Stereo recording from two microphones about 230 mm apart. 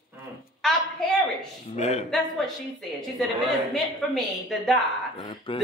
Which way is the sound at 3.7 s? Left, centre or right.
Centre.